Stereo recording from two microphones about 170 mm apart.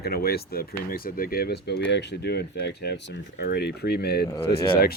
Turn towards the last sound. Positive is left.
turn(degrees=65)  # may be behind; listen again after turning